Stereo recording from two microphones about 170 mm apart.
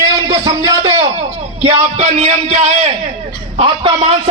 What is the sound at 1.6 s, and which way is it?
A man's voice, 40° right (ahead or behind).